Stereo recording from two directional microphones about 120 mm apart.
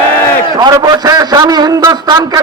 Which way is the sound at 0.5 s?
35° right (ahead or behind).